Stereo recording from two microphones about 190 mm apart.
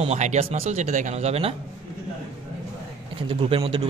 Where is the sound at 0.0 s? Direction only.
35° right (ahead or behind).